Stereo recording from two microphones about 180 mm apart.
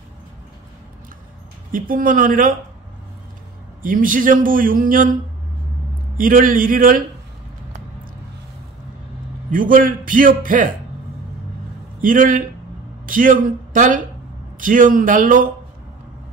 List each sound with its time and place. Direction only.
1.7 s a man's voice: 50° right (ahead or behind)
3.8 s a man's voice: 50° right (ahead or behind)
6.1 s a man's voice: 50° right (ahead or behind)
9.5 s a man's voice: 50° right (ahead or behind)
12.0 s a man's voice: 50° right (ahead or behind)